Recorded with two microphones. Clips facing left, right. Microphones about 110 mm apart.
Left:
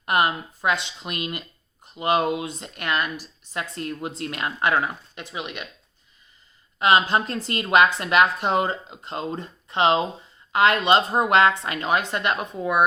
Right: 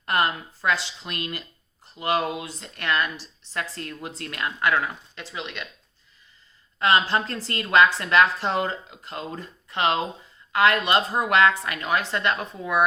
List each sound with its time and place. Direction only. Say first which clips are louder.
0.0 s speech: left 2 dB; 15° left (ahead or behind)
6.7 s speech: left 2 dB; 20° left (ahead or behind)